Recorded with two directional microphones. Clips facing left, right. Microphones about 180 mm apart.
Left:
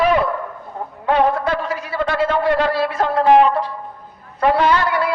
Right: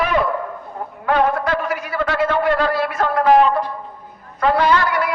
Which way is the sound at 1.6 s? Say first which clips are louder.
Even; 30° left (ahead or behind).